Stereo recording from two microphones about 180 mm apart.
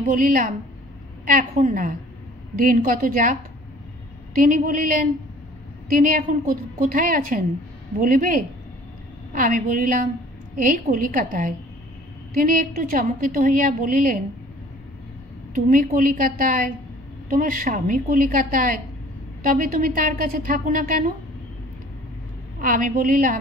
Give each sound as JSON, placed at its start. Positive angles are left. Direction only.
{"t": 0.0, "sound": "a woman's voice", "side_deg": -50}
{"t": 15.5, "sound": "a woman's voice", "side_deg": -50}
{"t": 22.6, "sound": "a woman's voice", "side_deg": -50}